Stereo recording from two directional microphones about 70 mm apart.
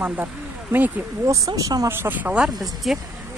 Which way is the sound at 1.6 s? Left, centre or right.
Right.